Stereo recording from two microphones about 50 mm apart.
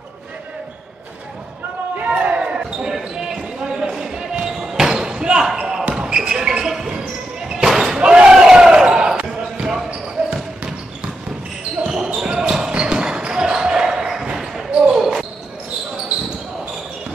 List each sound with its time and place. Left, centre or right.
2.0 s basketball bounce: right
2.4 s basketball bounce: centre
7.6 s slam: centre
8.0 s battle cry: centre
9.3 s basketball bounce: centre
11.8 s basketball bounce: centre